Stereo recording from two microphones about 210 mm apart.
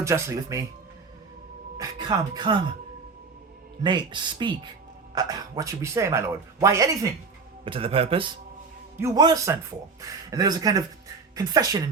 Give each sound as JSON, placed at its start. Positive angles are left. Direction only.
{"t": 0.0, "sound": "speech", "side_deg": -15}
{"t": 1.8, "sound": "speech", "side_deg": -20}
{"t": 3.8, "sound": "speech", "side_deg": -20}
{"t": 7.6, "sound": "speech", "side_deg": -25}
{"t": 9.0, "sound": "speech", "side_deg": -15}